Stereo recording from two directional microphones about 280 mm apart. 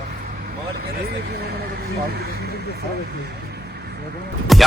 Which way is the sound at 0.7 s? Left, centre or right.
Right.